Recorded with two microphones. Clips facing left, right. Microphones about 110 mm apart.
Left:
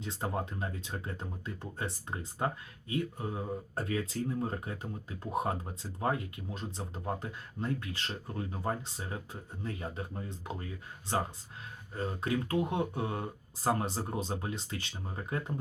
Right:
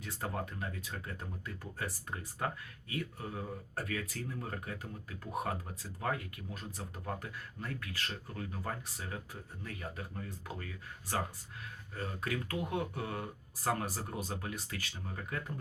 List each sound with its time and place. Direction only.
0.0 s speech: 25° left (ahead or behind)
11.9 s speech: 25° left (ahead or behind)